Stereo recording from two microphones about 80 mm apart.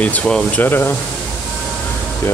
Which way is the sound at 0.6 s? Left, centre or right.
Left.